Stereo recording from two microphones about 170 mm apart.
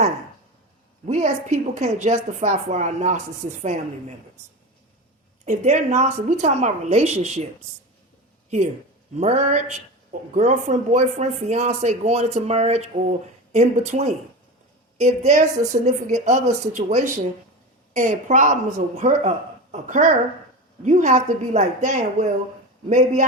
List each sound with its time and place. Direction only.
1.0 s speech: 45° right (ahead or behind)
5.5 s a woman's voice: 45° right (ahead or behind)
8.4 s a woman's voice: 40° right (ahead or behind)